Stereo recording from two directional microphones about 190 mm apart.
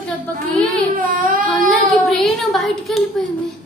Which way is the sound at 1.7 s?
Centre (ahead or behind).